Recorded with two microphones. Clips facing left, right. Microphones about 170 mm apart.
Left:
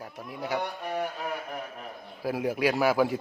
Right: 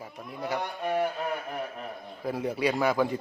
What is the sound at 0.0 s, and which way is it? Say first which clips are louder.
Speech: even; centre (ahead or behind).